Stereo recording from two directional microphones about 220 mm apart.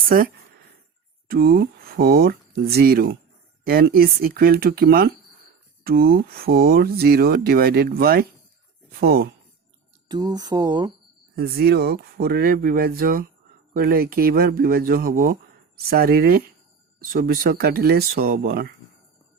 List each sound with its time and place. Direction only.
1.3 s speech: 40° right (ahead or behind)
10.1 s speech: 20° right (ahead or behind)
11.3 s speech: 45° right (ahead or behind)